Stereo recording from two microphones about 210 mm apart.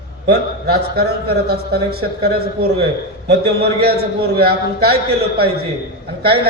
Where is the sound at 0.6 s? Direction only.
50° right (ahead or behind).